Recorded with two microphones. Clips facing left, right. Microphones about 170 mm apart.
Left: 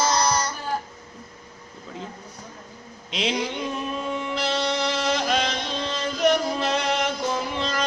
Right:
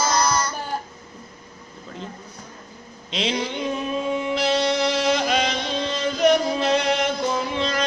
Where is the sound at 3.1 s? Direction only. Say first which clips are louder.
Right 1 dB; 5° left (ahead or behind).